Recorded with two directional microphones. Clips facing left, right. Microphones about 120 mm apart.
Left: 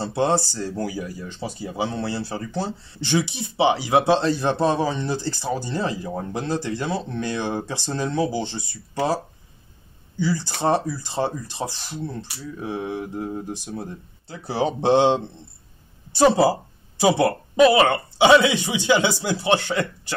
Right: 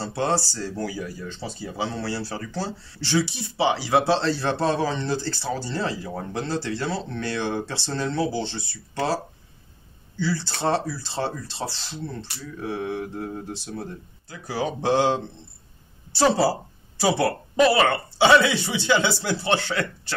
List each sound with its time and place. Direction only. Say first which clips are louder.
0.0 s speech: left 3 dB; 20° left (ahead or behind)
14.2 s speech: left 4 dB; 30° left (ahead or behind)